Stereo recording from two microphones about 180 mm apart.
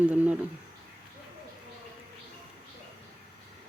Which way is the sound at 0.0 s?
10° right (ahead or behind).